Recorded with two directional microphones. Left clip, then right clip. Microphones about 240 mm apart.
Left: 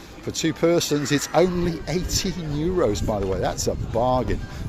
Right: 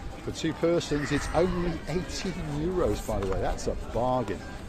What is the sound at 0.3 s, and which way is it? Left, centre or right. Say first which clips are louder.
Speech: left 6 dB; left.